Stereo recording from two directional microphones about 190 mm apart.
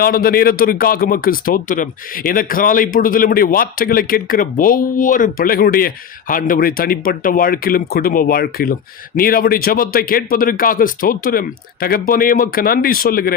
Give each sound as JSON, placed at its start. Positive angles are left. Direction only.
{"t": 0.0, "sound": "speech", "side_deg": 50}